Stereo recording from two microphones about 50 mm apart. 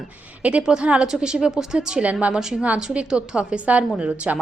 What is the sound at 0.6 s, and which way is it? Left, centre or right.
A woman's voice, centre.